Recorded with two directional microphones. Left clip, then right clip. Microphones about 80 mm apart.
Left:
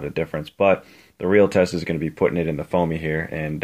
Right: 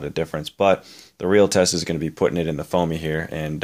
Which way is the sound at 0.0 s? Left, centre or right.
Right.